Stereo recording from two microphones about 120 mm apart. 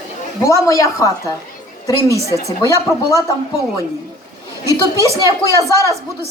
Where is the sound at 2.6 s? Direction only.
30° left (ahead or behind).